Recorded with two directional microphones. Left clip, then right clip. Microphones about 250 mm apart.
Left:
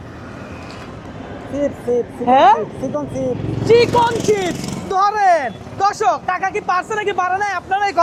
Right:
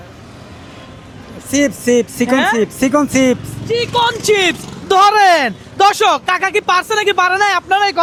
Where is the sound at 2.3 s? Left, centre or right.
Centre.